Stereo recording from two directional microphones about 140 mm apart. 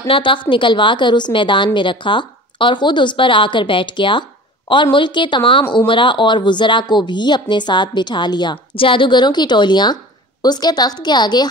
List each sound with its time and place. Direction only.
0.0 s a woman's voice: 40° left (ahead or behind)